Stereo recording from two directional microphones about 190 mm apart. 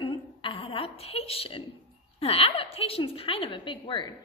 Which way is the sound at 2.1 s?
30° left (ahead or behind).